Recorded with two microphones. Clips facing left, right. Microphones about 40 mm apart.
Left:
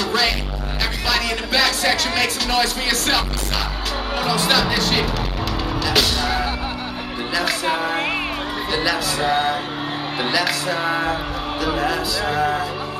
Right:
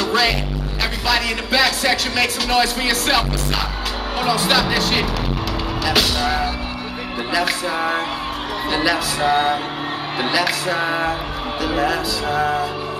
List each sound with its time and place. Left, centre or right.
0.0 s music: centre
8.7 s music: centre